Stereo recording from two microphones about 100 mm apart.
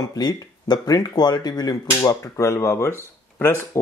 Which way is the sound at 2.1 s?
30° left (ahead or behind).